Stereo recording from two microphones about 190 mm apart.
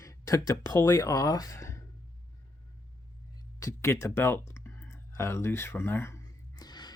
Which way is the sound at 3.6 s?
15° left (ahead or behind).